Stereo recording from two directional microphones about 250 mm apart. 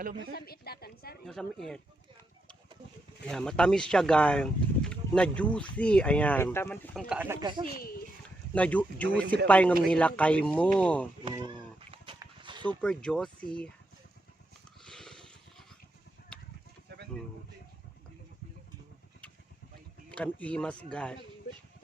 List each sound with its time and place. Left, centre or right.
0.3 s a woman's voice: left
1.3 s speech: centre
3.2 s speech: centre
7.1 s speech: centre
7.7 s a woman's voice: left
8.5 s speech: centre
11.3 s a sound: right
12.6 s speech: centre
14.8 s a sound: centre
20.1 s speech: centre